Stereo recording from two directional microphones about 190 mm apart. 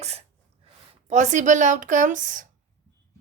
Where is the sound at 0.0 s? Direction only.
35° right (ahead or behind).